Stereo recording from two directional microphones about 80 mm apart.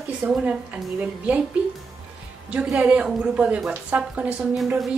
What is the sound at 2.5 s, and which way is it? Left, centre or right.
A woman's voice, centre.